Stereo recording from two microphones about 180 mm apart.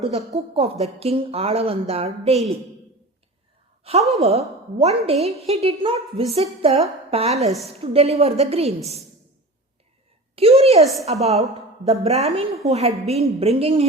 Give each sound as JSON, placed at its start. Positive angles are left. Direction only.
{"t": 0.0, "sound": "speech", "side_deg": -35}
{"t": 4.1, "sound": "speech", "side_deg": -35}
{"t": 10.3, "sound": "a woman's voice", "side_deg": -35}